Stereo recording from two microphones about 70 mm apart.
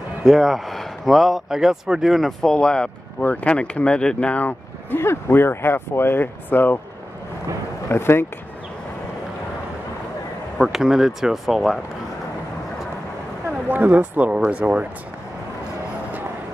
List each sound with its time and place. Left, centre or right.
0.2 s speech: centre
2.5 s speech: centre; by 6.8 s left
7.9 s speech: left
10.6 s speech: centre
13.7 s speech: right